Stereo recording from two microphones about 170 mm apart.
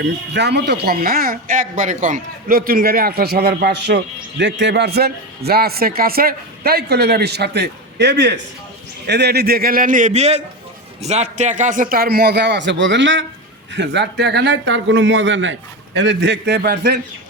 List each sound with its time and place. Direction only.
0.0 s speech: 85° right
9.0 s a man's voice: 75° right (ahead or behind)